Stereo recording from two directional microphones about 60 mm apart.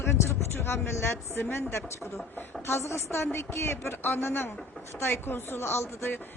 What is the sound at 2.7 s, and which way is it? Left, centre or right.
A woman's voice, left.